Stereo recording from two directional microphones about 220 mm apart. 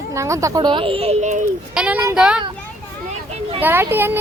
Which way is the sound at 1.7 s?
5° right (ahead or behind).